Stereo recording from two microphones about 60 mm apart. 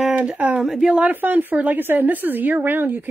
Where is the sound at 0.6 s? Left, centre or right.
Centre.